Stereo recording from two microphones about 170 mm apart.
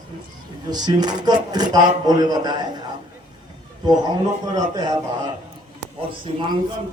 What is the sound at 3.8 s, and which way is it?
Speech, 25° right (ahead or behind).